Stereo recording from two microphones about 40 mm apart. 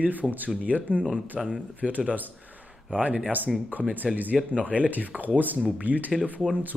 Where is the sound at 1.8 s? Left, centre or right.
Right.